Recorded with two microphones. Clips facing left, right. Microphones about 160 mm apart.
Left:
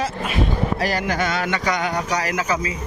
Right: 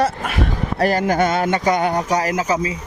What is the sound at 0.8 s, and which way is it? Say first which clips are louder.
Speech: right 5 dB; 50° right (ahead or behind).